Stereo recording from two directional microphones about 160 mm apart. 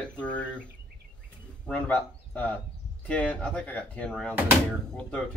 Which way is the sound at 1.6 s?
10° left (ahead or behind).